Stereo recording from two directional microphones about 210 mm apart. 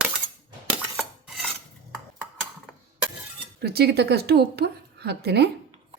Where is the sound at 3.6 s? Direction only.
50° right (ahead or behind).